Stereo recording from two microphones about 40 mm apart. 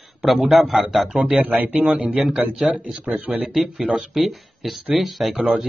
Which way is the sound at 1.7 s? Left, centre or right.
Right.